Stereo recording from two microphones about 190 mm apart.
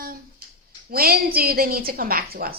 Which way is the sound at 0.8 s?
50° right (ahead or behind).